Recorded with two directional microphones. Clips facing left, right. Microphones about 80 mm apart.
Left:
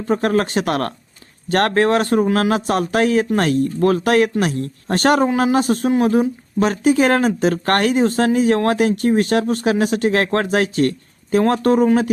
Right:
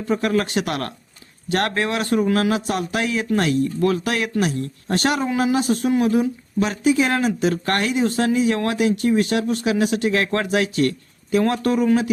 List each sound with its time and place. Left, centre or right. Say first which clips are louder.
0.0 s speech: left 3 dB; left